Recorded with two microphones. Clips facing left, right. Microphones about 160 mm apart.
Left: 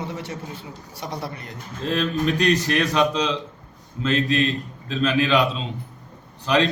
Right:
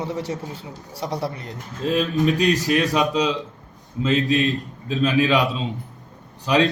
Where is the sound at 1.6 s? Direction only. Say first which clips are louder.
Right 2 dB; 5° right (ahead or behind).